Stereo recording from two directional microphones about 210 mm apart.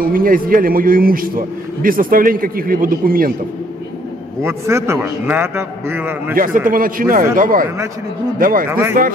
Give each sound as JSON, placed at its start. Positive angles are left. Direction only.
{"t": 0.0, "sound": "a man's voice", "side_deg": -45}
{"t": 4.4, "sound": "a man's voice", "side_deg": -10}
{"t": 6.3, "sound": "speech", "side_deg": -40}
{"t": 8.6, "sound": "a man's voice", "side_deg": -10}